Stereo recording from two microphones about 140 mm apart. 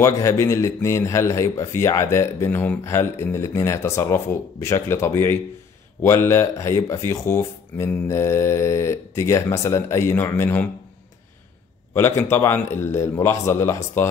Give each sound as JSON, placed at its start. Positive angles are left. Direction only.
{"t": 0.0, "sound": "speech", "side_deg": 20}
{"t": 11.9, "sound": "speech", "side_deg": 20}